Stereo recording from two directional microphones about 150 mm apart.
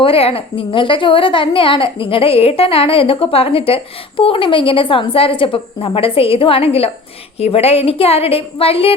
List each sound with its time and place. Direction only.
0.0 s a woman's voice: 40° left (ahead or behind)